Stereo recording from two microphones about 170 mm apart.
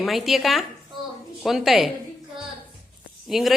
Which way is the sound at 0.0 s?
Centre (ahead or behind).